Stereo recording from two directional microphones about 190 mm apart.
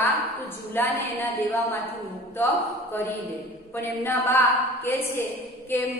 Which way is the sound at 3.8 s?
10° left (ahead or behind).